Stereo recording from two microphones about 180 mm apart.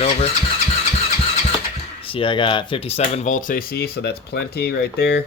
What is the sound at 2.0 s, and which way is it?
Speech, 30° left (ahead or behind).